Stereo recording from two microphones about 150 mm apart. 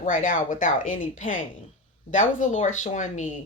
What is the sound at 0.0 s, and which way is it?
A woman's voice, 60° left (ahead or behind).